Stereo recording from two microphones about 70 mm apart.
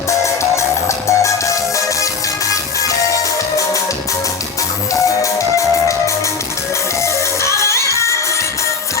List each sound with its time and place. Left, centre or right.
0.1 s music: left
5.0 s music: left
7.4 s music: left